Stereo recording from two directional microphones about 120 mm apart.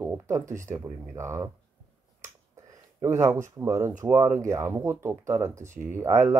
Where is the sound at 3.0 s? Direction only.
25° right (ahead or behind).